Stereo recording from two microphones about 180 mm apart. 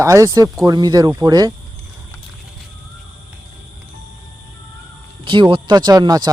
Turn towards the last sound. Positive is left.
turn(degrees=-20)  # may be behind; listen again after turning